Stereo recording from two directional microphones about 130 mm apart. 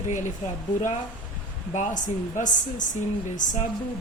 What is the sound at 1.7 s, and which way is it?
Speech, 75° left (ahead or behind).